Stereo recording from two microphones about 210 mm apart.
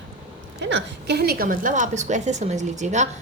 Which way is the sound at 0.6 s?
55° right (ahead or behind).